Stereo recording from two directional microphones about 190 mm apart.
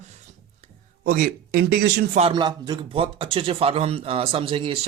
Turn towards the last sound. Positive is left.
turn(degrees=-30)  # may be behind; listen again after turning